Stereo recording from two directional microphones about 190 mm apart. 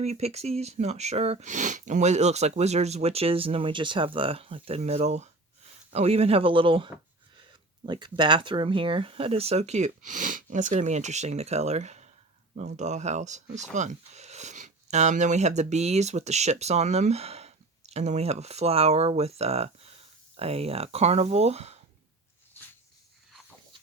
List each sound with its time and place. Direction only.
0.0 s speech: 35° right (ahead or behind)